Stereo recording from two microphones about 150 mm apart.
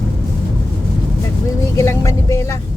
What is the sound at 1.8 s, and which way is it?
Speech, 20° left (ahead or behind).